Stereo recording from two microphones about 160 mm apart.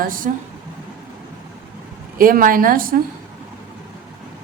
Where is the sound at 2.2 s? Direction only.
60° right (ahead or behind).